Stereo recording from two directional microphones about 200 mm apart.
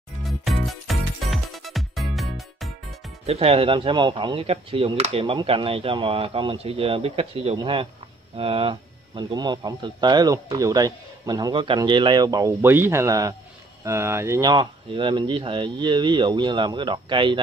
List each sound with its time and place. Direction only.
0.2 s music: centre (ahead or behind)
3.3 s speech: 30° right (ahead or behind)